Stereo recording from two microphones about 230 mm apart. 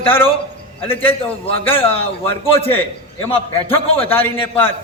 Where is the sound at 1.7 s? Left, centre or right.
Left.